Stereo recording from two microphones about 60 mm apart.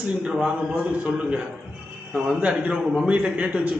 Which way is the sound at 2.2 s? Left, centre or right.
Centre.